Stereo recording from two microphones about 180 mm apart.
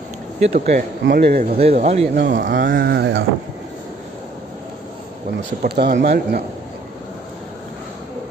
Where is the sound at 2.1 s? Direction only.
85° right; by 3.2 s 70° right (ahead or behind).